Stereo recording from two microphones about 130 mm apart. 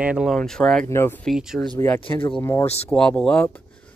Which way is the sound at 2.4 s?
20° left (ahead or behind).